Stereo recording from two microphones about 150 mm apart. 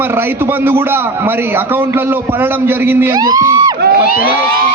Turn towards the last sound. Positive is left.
turn(degrees=-25)  # may be behind; listen again after turning